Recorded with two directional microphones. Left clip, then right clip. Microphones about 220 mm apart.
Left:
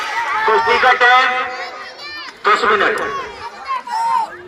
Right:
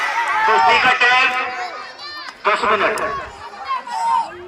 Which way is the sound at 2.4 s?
5° left (ahead or behind).